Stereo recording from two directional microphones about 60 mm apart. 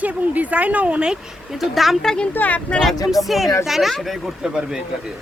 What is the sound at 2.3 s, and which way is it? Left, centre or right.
Speech, left.